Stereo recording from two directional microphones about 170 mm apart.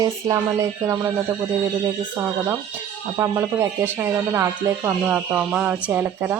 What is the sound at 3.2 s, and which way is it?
Speech, 15° right (ahead or behind).